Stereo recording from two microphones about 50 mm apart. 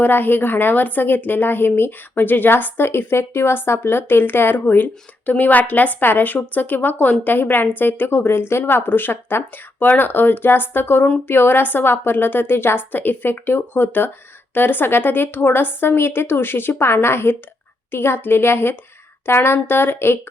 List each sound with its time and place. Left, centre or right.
0.0 s a woman's voice: left